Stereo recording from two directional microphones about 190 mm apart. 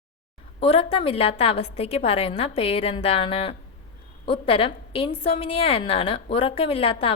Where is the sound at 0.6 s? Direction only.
30° left (ahead or behind).